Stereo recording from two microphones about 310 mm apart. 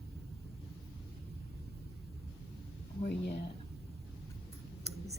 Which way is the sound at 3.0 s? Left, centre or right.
Left.